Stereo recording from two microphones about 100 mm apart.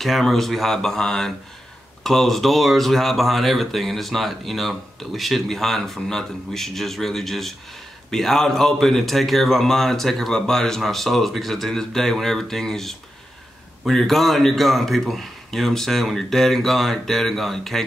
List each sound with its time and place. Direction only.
0.0 s speech: 5° left (ahead or behind)